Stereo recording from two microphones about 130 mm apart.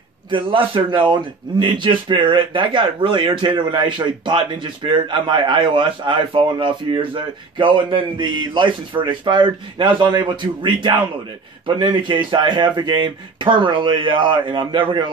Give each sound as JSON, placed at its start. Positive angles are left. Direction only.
{"t": 0.3, "sound": "a man's voice", "side_deg": -40}